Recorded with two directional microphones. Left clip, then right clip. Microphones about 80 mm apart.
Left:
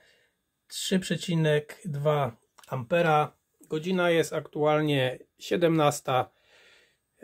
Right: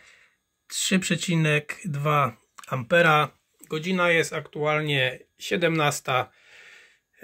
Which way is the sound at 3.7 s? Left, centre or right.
Left.